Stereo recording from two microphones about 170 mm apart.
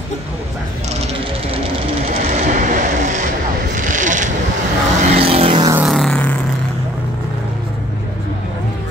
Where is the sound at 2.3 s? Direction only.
45° right (ahead or behind).